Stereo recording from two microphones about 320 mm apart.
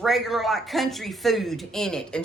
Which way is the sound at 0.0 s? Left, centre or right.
Centre.